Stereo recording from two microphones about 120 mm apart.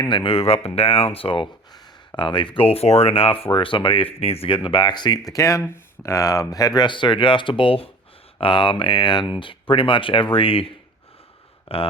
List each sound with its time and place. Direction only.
0.1 s speech: 45° left (ahead or behind)
11.7 s speech: 55° left (ahead or behind)